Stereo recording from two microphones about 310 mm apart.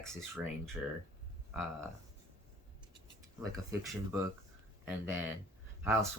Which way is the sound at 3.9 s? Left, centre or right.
Centre.